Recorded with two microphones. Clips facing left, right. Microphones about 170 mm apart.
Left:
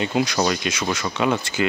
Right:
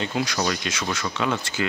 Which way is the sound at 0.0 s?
20° left (ahead or behind).